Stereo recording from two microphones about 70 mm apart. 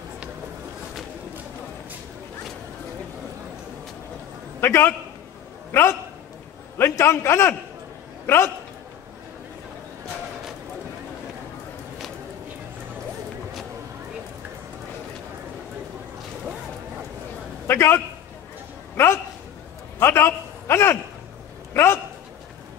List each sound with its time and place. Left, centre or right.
4.6 s a man's voice: left
17.6 s a man's voice: left
19.0 s a sound: left